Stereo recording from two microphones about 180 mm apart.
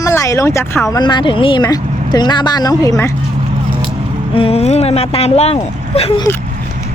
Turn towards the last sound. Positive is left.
turn(degrees=35)  # may be behind; listen again after turning